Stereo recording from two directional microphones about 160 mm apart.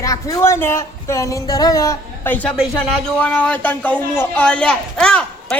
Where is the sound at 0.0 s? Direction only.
20° left (ahead or behind).